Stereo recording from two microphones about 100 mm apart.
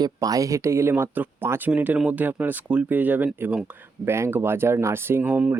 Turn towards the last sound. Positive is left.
turn(degrees=-15)  # may be behind; listen again after turning